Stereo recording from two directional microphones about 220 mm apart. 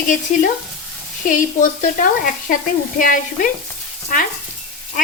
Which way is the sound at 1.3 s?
35° left (ahead or behind).